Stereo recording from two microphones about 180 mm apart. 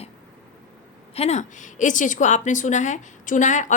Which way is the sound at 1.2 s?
40° left (ahead or behind).